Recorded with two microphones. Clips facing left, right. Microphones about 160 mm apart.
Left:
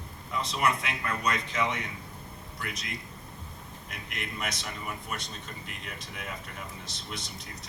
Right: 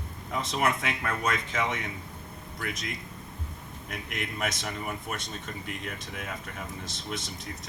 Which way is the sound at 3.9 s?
50° right (ahead or behind).